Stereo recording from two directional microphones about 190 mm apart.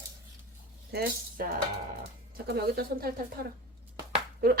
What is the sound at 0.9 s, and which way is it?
Speech, 55° right (ahead or behind).